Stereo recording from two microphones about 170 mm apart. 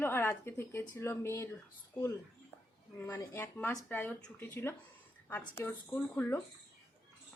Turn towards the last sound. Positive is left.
turn(degrees=10)  # may be behind; listen again after turning